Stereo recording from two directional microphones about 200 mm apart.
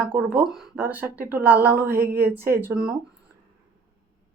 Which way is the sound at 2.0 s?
50° right (ahead or behind).